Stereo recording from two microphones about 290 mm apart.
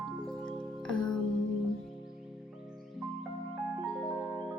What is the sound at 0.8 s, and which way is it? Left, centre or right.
Music, centre.